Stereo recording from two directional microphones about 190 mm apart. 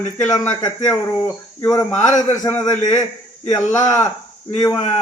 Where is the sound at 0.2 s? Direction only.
15° left (ahead or behind).